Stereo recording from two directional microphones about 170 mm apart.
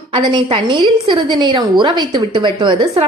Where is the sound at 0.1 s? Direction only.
30° right (ahead or behind).